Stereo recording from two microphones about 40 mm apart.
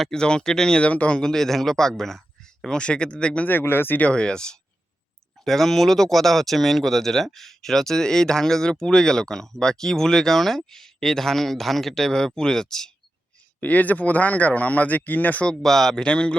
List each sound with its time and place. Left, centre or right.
0.1 s speech: centre
0.8 s speech: left
1.1 s speech: centre
2.6 s speech: left
3.6 s speech: left
4.1 s speech: left
5.5 s speech: centre
13.6 s speech: left
15.6 s speech: centre
16.0 s speech: left